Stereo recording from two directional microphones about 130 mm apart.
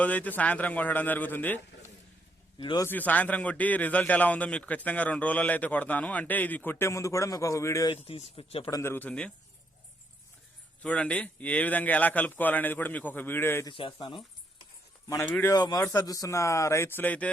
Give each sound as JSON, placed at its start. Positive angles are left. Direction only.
{"t": 0.0, "sound": "a man's voice", "side_deg": 10}
{"t": 2.6, "sound": "speech", "side_deg": 40}
{"t": 2.8, "sound": "a man's voice", "side_deg": 15}
{"t": 8.0, "sound": "speech", "side_deg": 50}
{"t": 8.7, "sound": "speech", "side_deg": 20}
{"t": 9.0, "sound": "a man's voice", "side_deg": 10}
{"t": 10.8, "sound": "a man's voice", "side_deg": 10}
{"t": 13.7, "sound": "speech", "side_deg": 40}
{"t": 15.4, "sound": "speech", "side_deg": 30}